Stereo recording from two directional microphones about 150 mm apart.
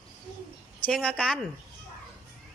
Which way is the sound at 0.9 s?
5° left (ahead or behind).